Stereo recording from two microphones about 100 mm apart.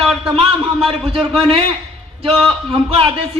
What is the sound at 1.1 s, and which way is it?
A man's voice, 75° right (ahead or behind).